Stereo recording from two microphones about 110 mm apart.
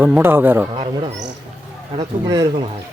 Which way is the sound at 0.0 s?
20° right (ahead or behind).